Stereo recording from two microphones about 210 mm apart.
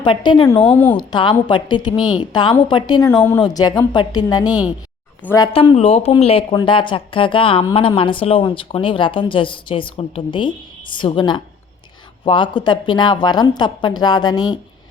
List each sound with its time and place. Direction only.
0.0 s speech: 25° left (ahead or behind)
0.6 s speech: 5° left (ahead or behind)
0.9 s speech: 20° left (ahead or behind)
5.5 s speech: 25° left (ahead or behind)